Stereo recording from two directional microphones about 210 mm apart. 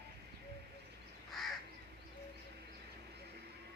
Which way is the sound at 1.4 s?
Centre (ahead or behind).